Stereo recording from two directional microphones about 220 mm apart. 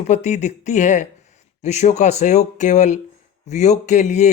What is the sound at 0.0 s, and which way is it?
Speech, 30° left (ahead or behind).